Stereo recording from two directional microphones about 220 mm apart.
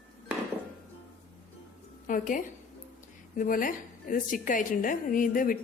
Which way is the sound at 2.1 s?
40° left (ahead or behind).